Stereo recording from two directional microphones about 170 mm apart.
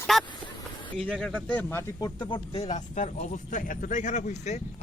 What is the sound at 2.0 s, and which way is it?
Speech, 20° left (ahead or behind).